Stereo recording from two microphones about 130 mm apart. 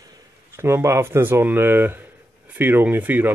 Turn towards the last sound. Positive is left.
turn(degrees=-15)  # may be behind; listen again after turning